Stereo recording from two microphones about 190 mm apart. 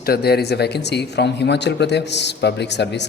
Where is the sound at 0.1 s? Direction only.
55° left (ahead or behind).